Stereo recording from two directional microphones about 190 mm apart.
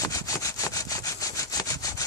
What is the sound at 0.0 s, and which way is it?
Sawing, 15° left (ahead or behind).